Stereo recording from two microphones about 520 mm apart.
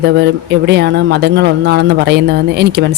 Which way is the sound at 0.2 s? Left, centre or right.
Centre.